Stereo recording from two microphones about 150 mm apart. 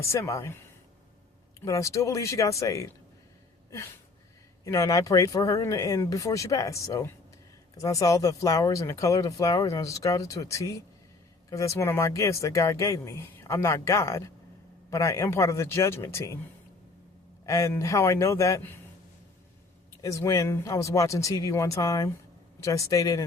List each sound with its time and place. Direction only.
0.1 s speech: 20° left (ahead or behind)
1.6 s speech: 20° left (ahead or behind)
4.6 s speech: 20° left (ahead or behind)
17.4 s speech: 20° left (ahead or behind)
20.0 s speech: 20° left (ahead or behind)